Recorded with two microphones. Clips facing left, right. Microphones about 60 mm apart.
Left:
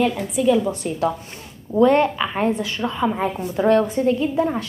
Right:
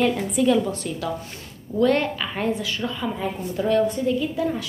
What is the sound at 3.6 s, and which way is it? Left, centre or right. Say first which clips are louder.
Speech: left 4 dB; left.